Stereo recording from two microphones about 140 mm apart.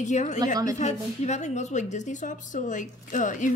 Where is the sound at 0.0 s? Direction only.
60° left (ahead or behind).